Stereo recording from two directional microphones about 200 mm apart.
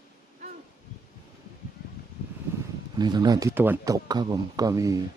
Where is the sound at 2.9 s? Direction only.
20° right (ahead or behind).